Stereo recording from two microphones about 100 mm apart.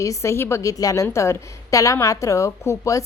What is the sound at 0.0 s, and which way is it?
A woman's voice, 30° left (ahead or behind).